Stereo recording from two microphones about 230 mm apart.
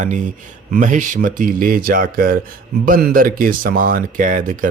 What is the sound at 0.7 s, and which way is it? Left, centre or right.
Speech, right.